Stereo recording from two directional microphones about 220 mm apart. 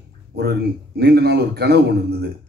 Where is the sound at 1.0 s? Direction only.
45° right (ahead or behind).